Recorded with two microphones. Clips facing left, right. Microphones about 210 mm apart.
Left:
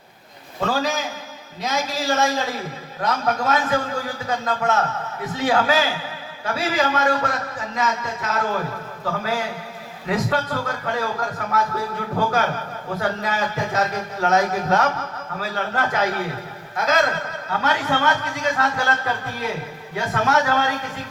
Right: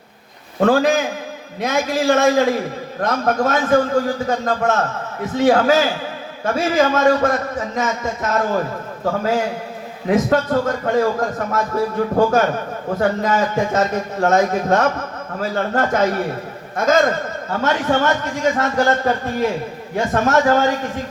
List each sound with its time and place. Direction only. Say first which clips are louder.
0.6 s a man's voice: right 8 dB; 55° right (ahead or behind)
10.1 s a man's voice: right 7 dB; 45° right (ahead or behind)